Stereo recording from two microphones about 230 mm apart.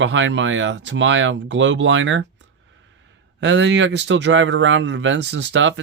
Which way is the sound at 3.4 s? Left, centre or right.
Right.